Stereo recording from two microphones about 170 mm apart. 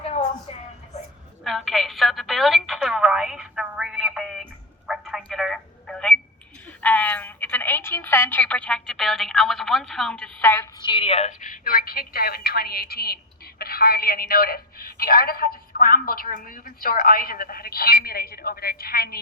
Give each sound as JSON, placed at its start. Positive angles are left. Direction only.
{"t": 1.5, "sound": "a woman's voice", "side_deg": 0}
{"t": 4.9, "sound": "telephone", "side_deg": 0}
{"t": 6.8, "sound": "a woman's voice", "side_deg": 10}
{"t": 10.5, "sound": "a woman's voice", "side_deg": 20}